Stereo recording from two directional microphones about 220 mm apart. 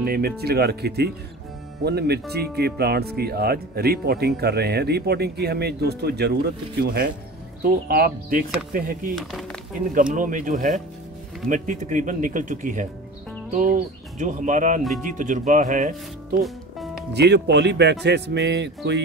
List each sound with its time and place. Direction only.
0.0 s speech: 45° right (ahead or behind)
9.1 s speech: centre (ahead or behind)
10.1 s speech: 35° right (ahead or behind)
16.4 s music: centre (ahead or behind)
17.1 s speech: 50° right (ahead or behind)